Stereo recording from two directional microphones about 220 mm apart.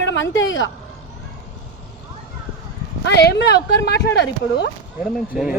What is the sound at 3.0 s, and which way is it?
Speech, 50° left (ahead or behind).